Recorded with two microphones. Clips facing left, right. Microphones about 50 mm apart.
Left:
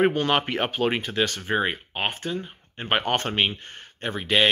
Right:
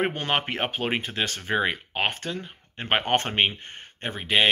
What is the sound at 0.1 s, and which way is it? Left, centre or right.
Speech, right.